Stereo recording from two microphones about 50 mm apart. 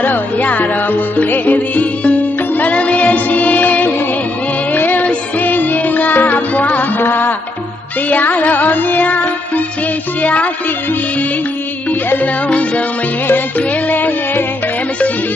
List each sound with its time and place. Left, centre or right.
0.0 s music: left
11.9 s music: left